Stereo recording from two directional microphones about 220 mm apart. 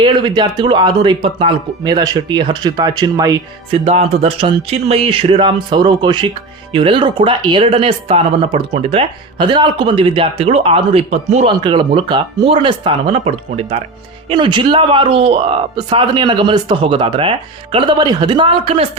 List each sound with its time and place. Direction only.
0.0 s speech: 20° right (ahead or behind)
3.8 s speech: 30° right (ahead or behind)